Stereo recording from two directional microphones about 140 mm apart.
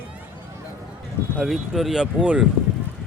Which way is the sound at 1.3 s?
Centre (ahead or behind).